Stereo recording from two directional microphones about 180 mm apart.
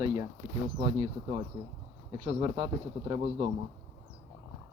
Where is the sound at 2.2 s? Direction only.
25° right (ahead or behind).